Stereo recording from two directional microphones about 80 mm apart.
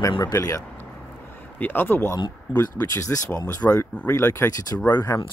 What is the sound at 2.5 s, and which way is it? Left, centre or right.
Speech, left.